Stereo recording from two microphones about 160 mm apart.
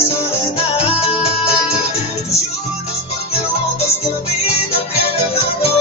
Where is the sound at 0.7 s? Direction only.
40° left (ahead or behind).